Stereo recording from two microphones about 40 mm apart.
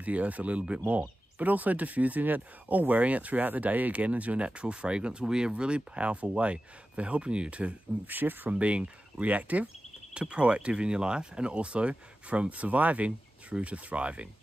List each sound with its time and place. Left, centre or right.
0.0 s speech: right
8.1 s speech: right
8.5 s speech: right
10.1 s speech: right